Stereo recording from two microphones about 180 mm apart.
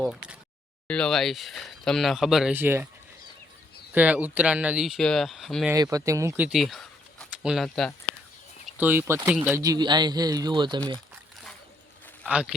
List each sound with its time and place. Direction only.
0.9 s speech: 5° left (ahead or behind); by 2.8 s 10° right (ahead or behind)
3.9 s speech: 10° right (ahead or behind)
5.7 s speech: 20° right (ahead or behind); by 7.9 s centre (ahead or behind)
8.8 s speech: 10° right (ahead or behind)
12.3 s speech: 5° right (ahead or behind)